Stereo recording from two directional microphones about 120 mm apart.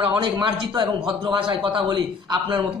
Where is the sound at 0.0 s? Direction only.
40° right (ahead or behind).